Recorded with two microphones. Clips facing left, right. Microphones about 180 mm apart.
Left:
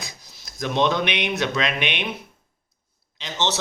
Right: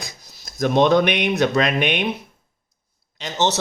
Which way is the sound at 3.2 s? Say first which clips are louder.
Right 4 dB; 40° right (ahead or behind).